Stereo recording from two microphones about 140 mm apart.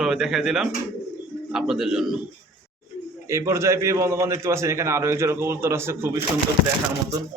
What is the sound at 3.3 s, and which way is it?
A man's voice, 20° right (ahead or behind).